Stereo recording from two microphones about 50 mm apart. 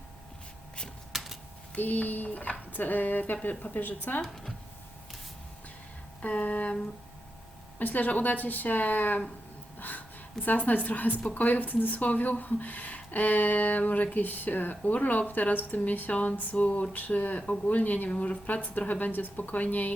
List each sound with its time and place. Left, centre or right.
1.1 s typing: centre
1.7 s a woman's voice: left
6.2 s a sound: left
7.8 s a woman's voice: left
10.4 s a woman's voice: left